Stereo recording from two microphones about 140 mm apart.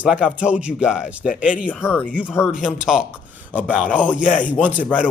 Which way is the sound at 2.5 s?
5° right (ahead or behind).